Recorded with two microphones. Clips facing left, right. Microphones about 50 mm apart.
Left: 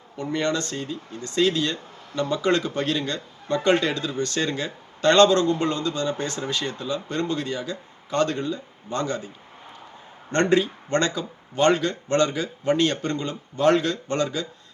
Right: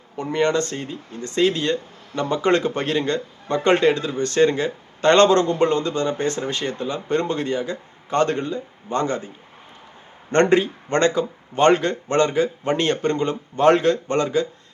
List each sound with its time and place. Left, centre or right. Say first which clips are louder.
0.2 s speech: right 5 dB; right
10.5 s speech: right 2 dB; right